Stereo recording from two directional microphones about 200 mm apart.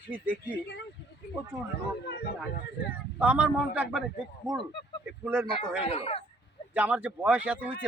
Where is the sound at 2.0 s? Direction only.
55° left (ahead or behind).